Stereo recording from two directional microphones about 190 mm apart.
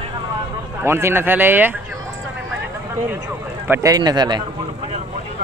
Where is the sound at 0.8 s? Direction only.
15° right (ahead or behind).